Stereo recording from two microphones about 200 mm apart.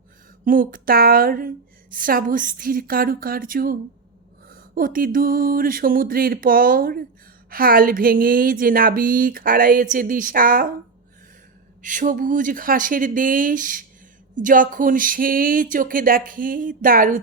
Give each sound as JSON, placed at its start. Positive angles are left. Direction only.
{"t": 0.4, "sound": "a woman's voice", "side_deg": -45}
{"t": 11.8, "sound": "a woman's voice", "side_deg": -40}